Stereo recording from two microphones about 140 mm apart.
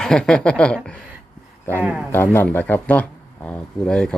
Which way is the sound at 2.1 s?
15° left (ahead or behind).